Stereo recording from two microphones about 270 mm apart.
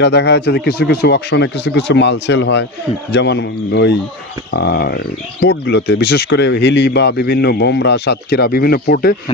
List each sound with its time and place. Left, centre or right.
0.0 s speech: left